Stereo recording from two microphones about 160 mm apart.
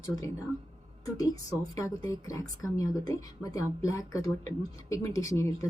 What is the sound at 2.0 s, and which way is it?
A woman's voice, 20° left (ahead or behind).